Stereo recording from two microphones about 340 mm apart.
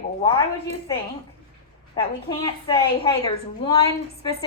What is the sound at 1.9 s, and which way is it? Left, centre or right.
A woman's voice, centre.